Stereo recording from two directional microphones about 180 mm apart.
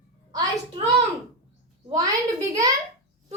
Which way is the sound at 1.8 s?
20° right (ahead or behind).